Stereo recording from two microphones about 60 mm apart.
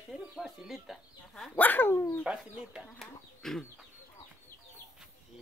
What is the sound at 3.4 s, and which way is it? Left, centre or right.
Chicken, centre.